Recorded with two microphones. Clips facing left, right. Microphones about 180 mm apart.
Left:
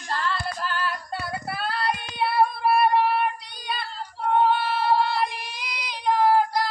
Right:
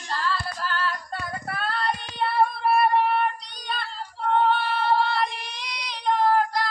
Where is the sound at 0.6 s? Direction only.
15° left (ahead or behind).